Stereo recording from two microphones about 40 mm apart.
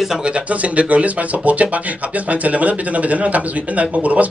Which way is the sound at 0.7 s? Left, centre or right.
Right.